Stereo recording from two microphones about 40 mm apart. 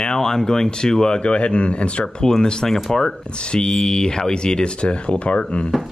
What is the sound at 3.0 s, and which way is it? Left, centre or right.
Speech, centre.